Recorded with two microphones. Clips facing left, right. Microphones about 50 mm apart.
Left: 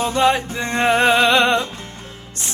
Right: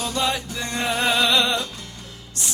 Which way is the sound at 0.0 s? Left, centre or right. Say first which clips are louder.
Left 8 dB; left.